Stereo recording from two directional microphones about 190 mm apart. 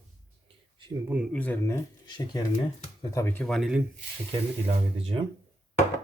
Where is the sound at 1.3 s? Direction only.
10° left (ahead or behind).